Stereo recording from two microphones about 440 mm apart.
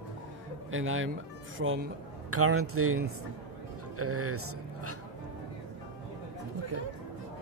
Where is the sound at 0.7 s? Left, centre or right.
Right.